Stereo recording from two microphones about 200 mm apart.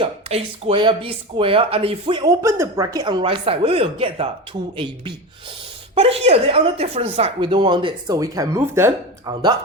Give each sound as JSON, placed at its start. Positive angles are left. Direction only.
{"t": 0.0, "sound": "speech", "side_deg": -30}
{"t": 2.2, "sound": "speech", "side_deg": -15}
{"t": 5.9, "sound": "speech", "side_deg": -30}